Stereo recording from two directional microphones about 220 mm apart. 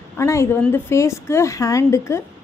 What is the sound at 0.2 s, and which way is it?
A woman's voice, 10° left (ahead or behind).